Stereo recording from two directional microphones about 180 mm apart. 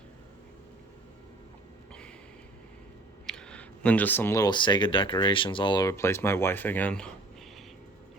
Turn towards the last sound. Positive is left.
turn(degrees=5)  # may be behind; listen again after turning